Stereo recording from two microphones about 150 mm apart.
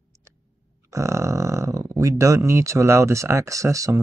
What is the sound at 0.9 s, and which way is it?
Speech, 20° right (ahead or behind).